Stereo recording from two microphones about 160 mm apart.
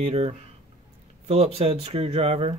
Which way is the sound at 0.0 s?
40° right (ahead or behind).